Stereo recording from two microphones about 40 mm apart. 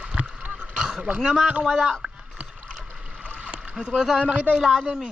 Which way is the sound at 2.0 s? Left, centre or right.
Right.